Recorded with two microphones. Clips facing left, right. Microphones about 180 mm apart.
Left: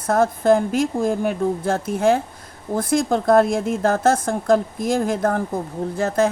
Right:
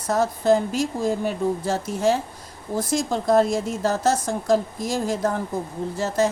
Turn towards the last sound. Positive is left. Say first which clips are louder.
# left 3 dB
turn(degrees=55)  # may be behind; listen again after turning